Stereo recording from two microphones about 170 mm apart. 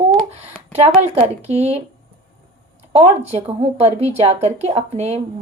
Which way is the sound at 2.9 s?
35° right (ahead or behind).